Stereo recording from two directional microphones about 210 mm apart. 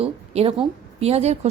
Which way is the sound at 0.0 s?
25° right (ahead or behind).